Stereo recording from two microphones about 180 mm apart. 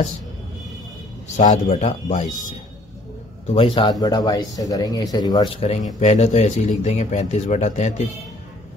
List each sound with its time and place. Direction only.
1.3 s speech: 40° left (ahead or behind)
3.5 s speech: 30° left (ahead or behind)